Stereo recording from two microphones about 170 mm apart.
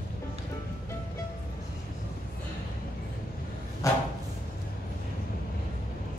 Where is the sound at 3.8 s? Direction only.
20° left (ahead or behind).